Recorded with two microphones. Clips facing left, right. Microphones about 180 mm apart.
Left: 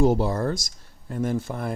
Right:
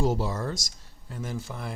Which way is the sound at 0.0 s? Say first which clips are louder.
Left 6 dB; 55° left (ahead or behind).